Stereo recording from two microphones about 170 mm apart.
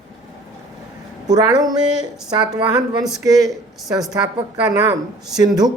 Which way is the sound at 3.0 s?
Centre (ahead or behind).